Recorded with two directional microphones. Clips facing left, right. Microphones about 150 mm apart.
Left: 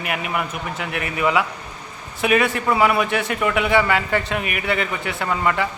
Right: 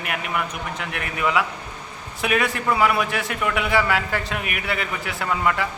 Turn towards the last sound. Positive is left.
turn(degrees=0)  # may be behind; listen again after turning